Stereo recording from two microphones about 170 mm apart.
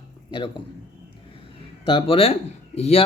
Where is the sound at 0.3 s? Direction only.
30° left (ahead or behind).